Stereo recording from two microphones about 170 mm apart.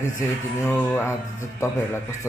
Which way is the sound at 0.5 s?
15° left (ahead or behind).